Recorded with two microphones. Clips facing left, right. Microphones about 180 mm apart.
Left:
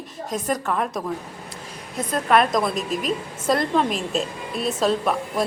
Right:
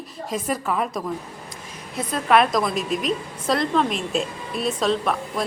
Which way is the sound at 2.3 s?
Centre (ahead or behind).